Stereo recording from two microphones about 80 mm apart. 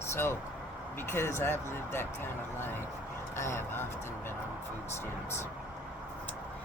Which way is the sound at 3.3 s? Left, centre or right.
Left.